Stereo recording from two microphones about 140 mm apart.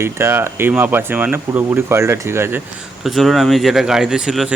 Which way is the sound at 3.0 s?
Centre (ahead or behind).